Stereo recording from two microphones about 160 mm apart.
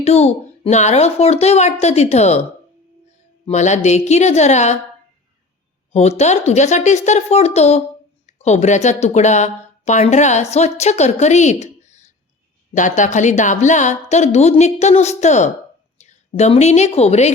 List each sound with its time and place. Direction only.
0.0 s speech: 40° left (ahead or behind)
3.4 s a woman's voice: 45° left (ahead or behind)
5.9 s a woman's voice: 40° left (ahead or behind)